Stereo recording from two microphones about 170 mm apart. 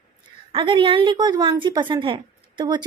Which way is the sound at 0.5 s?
30° right (ahead or behind).